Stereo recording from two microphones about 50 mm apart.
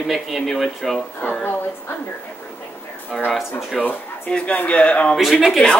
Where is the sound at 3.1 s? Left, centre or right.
Centre.